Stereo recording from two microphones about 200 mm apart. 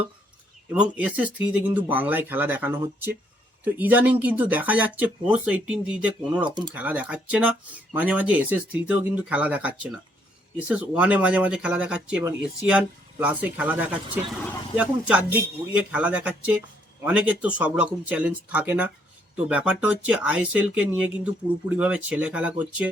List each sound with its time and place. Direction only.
0.7 s speech: 5° right (ahead or behind)
6.4 s speech: 20° right (ahead or behind)
6.7 s speech: 5° right (ahead or behind)